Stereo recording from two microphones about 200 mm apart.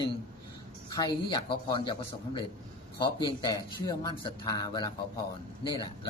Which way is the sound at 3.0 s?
20° left (ahead or behind).